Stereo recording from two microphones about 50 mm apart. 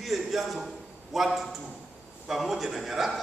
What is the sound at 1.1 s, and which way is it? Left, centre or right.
A man's voice, centre.